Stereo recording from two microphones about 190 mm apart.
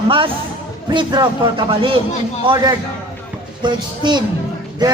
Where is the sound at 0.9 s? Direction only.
20° right (ahead or behind).